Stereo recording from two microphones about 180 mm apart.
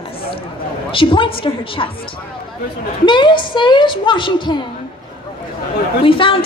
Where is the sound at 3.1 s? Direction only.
25° left (ahead or behind).